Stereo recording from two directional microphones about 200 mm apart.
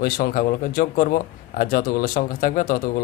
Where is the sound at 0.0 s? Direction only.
45° left (ahead or behind).